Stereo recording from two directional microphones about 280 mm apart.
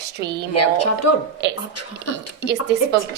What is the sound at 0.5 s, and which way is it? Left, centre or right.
Speech, left.